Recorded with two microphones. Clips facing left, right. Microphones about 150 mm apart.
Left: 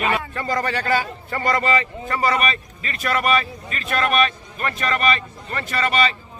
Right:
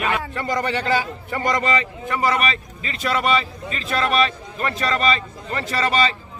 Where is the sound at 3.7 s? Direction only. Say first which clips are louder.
Even; 25° right (ahead or behind).